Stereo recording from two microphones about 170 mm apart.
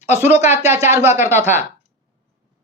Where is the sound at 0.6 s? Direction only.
15° right (ahead or behind).